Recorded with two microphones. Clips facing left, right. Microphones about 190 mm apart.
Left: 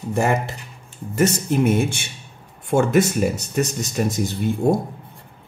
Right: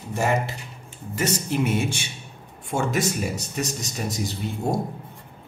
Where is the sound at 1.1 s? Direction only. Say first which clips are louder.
Left 6 dB; 50° left (ahead or behind).